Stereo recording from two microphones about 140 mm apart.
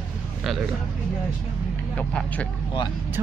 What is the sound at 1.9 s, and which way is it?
Speech, 10° left (ahead or behind).